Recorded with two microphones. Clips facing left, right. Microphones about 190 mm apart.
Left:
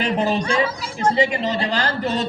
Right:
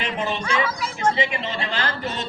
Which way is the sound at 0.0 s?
35° left (ahead or behind).